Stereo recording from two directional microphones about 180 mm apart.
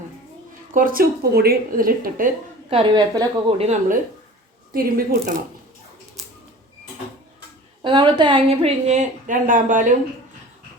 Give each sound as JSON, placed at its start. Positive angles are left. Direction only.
{"t": 0.7, "sound": "speech", "side_deg": -50}
{"t": 2.6, "sound": "a woman's voice", "side_deg": -30}
{"t": 3.6, "sound": "a woman's voice", "side_deg": -40}
{"t": 4.7, "sound": "speech", "side_deg": -55}
{"t": 7.8, "sound": "a woman's voice", "side_deg": -25}